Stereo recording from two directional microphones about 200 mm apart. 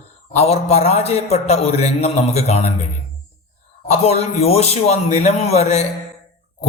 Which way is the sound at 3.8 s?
30° left (ahead or behind).